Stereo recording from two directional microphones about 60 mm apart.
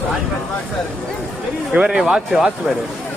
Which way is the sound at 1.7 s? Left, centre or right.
Centre.